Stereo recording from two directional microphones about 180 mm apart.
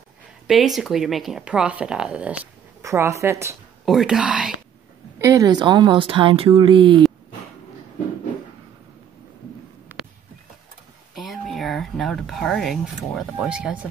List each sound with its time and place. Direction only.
0.5 s speech: centre (ahead or behind)
3.8 s speech: centre (ahead or behind)
5.2 s speech: 20° right (ahead or behind)
11.1 s speech: centre (ahead or behind)